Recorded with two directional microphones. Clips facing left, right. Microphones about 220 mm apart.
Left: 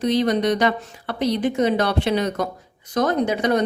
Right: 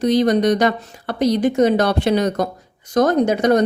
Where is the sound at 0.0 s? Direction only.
45° right (ahead or behind).